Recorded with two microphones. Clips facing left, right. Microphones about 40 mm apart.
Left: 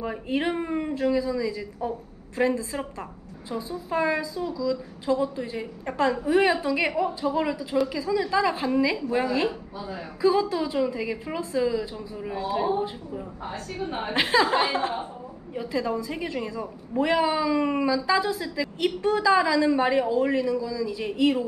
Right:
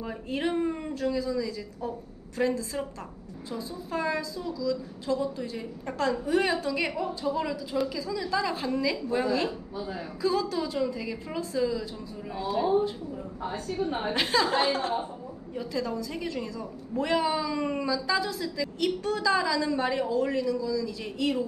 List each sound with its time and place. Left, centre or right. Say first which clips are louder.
0.0 s a woman's voice: left 4 dB; left